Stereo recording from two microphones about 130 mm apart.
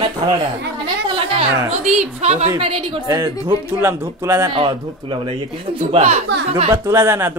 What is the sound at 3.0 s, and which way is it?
Speech, 30° right (ahead or behind).